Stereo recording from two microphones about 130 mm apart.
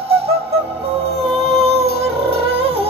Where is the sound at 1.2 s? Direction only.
50° right (ahead or behind).